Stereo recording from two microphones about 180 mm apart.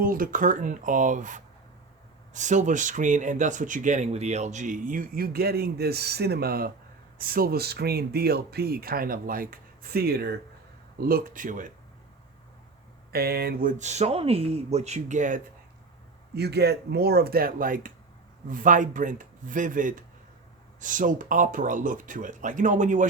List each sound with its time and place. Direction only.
0.0 s speech: 50° right (ahead or behind)
13.1 s speech: 60° right (ahead or behind); by 15.4 s 45° right (ahead or behind)
16.3 s speech: 65° right (ahead or behind); by 23.0 s 45° right (ahead or behind)